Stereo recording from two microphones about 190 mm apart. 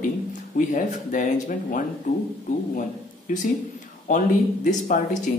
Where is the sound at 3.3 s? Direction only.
45° left (ahead or behind).